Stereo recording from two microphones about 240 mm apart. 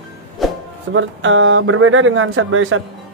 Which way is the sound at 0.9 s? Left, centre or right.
Right.